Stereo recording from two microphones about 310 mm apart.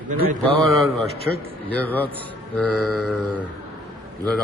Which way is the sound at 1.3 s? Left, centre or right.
Centre.